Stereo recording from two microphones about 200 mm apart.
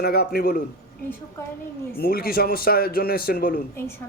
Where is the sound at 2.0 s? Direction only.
50° left (ahead or behind).